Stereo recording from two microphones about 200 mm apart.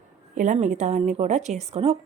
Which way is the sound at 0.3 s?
35° right (ahead or behind).